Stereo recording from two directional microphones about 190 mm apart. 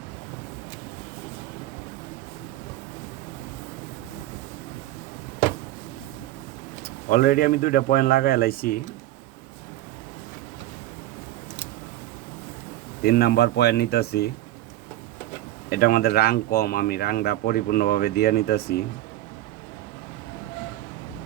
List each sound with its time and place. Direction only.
7.1 s speech: 50° left (ahead or behind)
13.0 s speech: 55° left (ahead or behind)
15.7 s speech: 50° left (ahead or behind)